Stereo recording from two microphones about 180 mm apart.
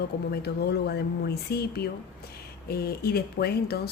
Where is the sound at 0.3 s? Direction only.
60° left (ahead or behind).